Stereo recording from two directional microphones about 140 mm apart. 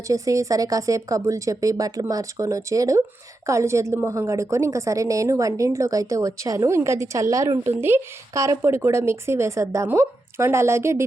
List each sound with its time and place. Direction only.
0.1 s a woman's voice: 25° right (ahead or behind)